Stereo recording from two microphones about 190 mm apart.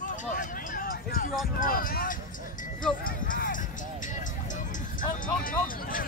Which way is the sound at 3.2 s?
45° left (ahead or behind).